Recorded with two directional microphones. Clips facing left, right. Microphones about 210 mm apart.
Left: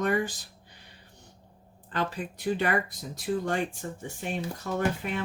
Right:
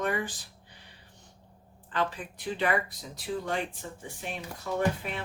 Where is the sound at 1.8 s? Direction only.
40° left (ahead or behind).